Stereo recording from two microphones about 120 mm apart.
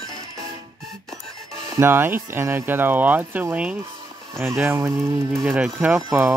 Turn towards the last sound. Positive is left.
turn(degrees=-15)  # may be behind; listen again after turning